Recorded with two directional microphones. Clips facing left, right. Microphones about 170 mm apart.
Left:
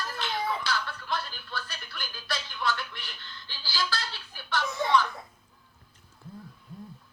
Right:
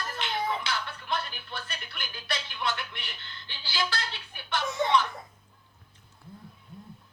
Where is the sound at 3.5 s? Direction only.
20° right (ahead or behind).